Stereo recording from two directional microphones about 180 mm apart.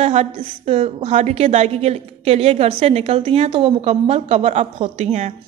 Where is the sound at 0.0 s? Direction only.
35° right (ahead or behind).